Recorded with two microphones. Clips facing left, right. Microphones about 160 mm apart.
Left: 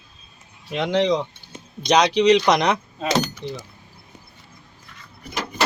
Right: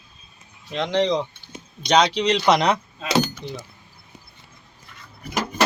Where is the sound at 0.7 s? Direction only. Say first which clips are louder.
Left 1 dB; 5° left (ahead or behind).